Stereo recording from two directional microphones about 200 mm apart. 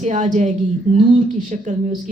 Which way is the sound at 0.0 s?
35° right (ahead or behind).